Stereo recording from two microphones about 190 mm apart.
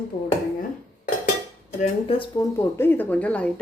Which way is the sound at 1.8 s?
30° left (ahead or behind).